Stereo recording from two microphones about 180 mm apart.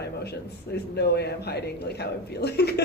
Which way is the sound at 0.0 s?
65° left (ahead or behind).